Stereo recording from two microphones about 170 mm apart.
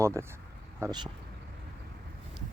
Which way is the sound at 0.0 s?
15° right (ahead or behind).